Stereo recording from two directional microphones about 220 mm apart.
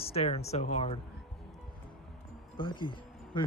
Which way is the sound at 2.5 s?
20° left (ahead or behind).